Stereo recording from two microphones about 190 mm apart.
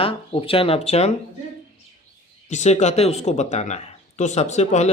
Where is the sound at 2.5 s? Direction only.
35° left (ahead or behind).